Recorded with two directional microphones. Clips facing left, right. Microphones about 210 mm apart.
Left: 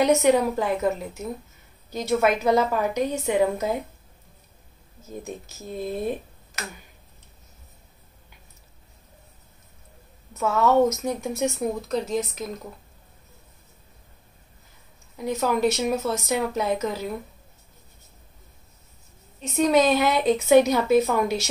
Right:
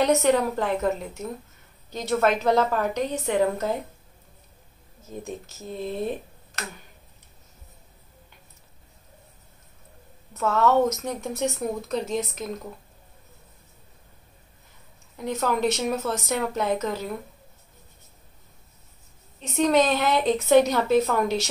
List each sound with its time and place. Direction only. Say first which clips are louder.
0.0 s speech: left 2 dB; 10° left (ahead or behind)
5.8 s speech: left 1 dB; 5° left (ahead or behind)
10.3 s speech: left 1 dB; 10° left (ahead or behind)
15.1 s speech: left 2 dB; 5° left (ahead or behind)
19.4 s speech: left 1 dB; 10° left (ahead or behind)